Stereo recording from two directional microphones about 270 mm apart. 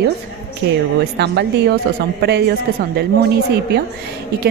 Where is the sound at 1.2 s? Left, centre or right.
Right.